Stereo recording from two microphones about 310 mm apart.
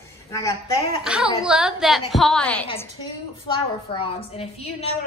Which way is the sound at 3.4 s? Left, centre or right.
Centre.